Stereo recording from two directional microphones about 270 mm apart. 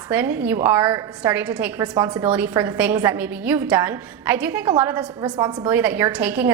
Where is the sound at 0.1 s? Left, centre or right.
Centre.